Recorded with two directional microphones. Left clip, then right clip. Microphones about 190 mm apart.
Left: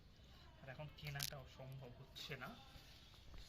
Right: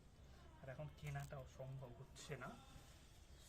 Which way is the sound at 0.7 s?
15° right (ahead or behind).